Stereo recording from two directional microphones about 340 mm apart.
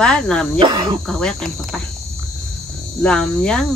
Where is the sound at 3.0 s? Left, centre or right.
Centre.